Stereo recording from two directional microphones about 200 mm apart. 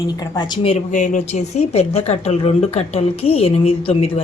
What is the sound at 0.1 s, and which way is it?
Speech, 20° left (ahead or behind).